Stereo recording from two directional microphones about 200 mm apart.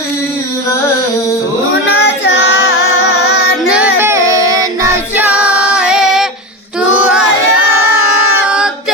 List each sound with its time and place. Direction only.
1.9 s music: 70° left (ahead or behind)
3.7 s child singing: 5° right (ahead or behind)
5.1 s female singing: 10° right (ahead or behind)
8.4 s singing: 5° right (ahead or behind)